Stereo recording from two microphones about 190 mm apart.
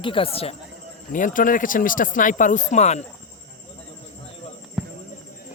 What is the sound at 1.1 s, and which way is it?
Speech, 45° left (ahead or behind).